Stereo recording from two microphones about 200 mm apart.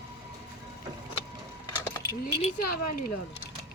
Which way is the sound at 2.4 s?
35° left (ahead or behind).